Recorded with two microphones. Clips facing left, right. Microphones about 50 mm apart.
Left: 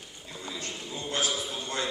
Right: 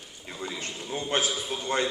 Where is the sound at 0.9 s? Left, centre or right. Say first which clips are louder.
Right 3 dB; right.